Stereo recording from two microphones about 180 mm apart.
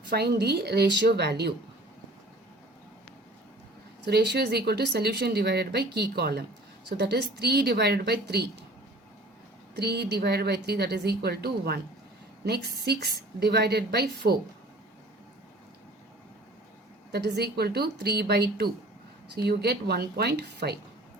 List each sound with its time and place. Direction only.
0.1 s speech: 65° right (ahead or behind)
4.0 s speech: 65° right (ahead or behind)
9.7 s speech: 70° right (ahead or behind)
17.1 s speech: 65° right (ahead or behind)